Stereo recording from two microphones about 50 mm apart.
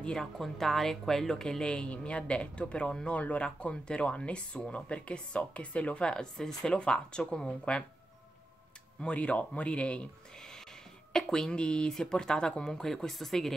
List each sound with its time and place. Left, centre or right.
0.0 s speech: centre; by 3.4 s left
3.4 s speech: centre
9.0 s speech: left
11.1 s speech: centre